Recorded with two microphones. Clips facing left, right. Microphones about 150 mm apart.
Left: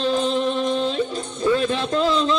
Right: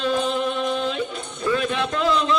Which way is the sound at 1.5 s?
30° left (ahead or behind).